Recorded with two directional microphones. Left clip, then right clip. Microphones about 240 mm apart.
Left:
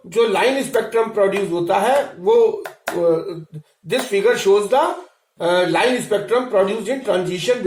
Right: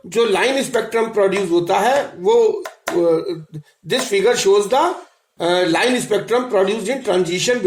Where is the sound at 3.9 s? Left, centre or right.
Right.